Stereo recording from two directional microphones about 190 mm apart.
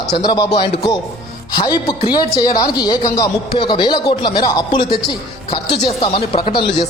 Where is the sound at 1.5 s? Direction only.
25° left (ahead or behind).